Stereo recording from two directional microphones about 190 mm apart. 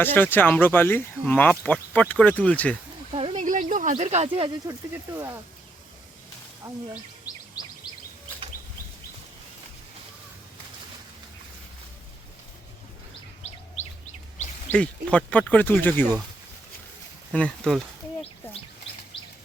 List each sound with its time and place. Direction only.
0.0 s speech: 10° left (ahead or behind)
3.1 s a sound: 30° right (ahead or behind)
3.4 s speech: 45° right (ahead or behind); by 4.8 s 25° right (ahead or behind)
6.6 s speech: 25° right (ahead or behind)
13.4 s chirp: 35° left (ahead or behind)
14.7 s speech: 5° left (ahead or behind)
17.3 s speech: 5° left (ahead or behind)
19.1 s bird: 30° left (ahead or behind)